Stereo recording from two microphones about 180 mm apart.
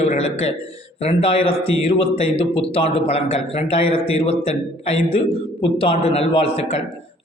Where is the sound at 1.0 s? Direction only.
30° left (ahead or behind).